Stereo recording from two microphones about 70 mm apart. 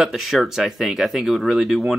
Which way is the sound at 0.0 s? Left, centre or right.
Centre.